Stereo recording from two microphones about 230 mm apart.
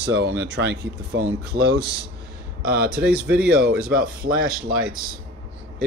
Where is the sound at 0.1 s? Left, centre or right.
Right.